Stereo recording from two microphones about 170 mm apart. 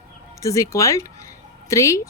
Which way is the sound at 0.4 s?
20° left (ahead or behind).